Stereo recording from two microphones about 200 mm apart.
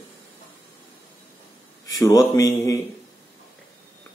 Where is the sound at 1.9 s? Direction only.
15° left (ahead or behind).